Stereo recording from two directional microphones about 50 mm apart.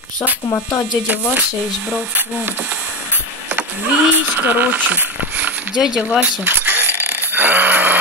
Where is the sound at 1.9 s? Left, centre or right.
Right.